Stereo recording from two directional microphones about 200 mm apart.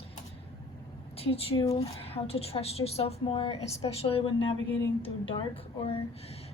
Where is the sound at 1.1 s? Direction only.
30° left (ahead or behind).